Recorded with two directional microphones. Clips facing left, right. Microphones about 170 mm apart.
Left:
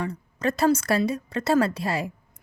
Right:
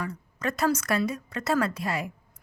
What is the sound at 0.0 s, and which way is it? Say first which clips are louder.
A woman's voice: left 4 dB; 30° left (ahead or behind).